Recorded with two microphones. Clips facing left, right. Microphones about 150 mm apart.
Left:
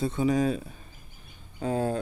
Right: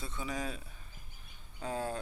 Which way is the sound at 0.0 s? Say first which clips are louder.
Left 14 dB; 60° left (ahead or behind).